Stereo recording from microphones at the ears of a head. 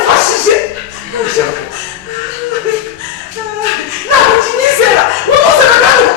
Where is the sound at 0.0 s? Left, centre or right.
Left.